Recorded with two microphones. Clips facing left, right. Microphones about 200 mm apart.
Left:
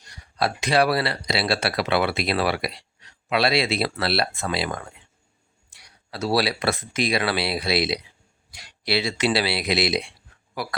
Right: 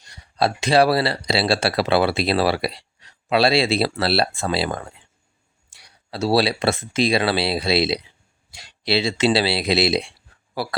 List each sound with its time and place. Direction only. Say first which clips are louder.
0.3 s speech: right 4 dB; 25° right (ahead or behind)